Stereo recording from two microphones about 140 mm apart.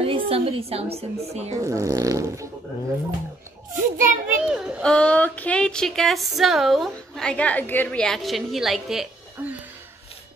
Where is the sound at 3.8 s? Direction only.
75° right (ahead or behind).